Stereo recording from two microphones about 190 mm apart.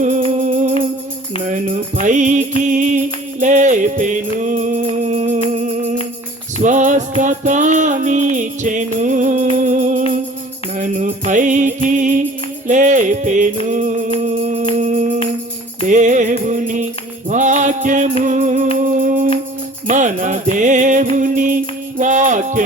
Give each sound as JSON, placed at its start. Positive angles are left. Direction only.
{"t": 0.3, "sound": "music", "side_deg": -40}
{"t": 18.8, "sound": "humming", "side_deg": -45}
{"t": 19.9, "sound": "music", "side_deg": -40}